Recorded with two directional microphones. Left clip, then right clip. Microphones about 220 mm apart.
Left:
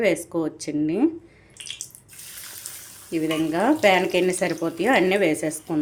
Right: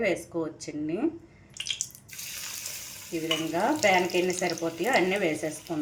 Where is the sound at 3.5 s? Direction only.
55° left (ahead or behind).